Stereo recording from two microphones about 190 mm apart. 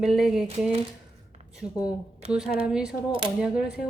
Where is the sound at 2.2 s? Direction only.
35° right (ahead or behind).